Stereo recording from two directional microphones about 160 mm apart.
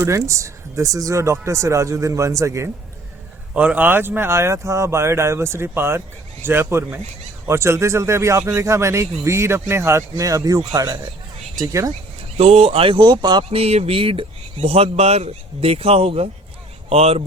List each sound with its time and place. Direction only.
0.0 s speech: 20° right (ahead or behind)
3.5 s speech: 10° right (ahead or behind)
12.4 s speech: 40° right (ahead or behind)